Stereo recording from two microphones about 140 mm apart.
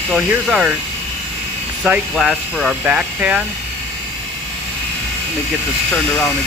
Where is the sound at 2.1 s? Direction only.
Centre (ahead or behind).